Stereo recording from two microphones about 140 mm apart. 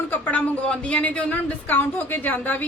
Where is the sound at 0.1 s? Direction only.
10° left (ahead or behind).